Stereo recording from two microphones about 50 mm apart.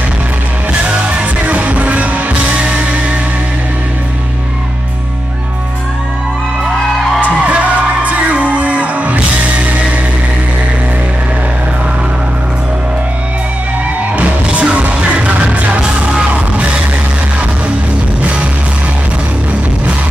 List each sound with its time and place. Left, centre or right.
0.8 s music: right
7.2 s music: right
14.1 s music: right
15.8 s music: centre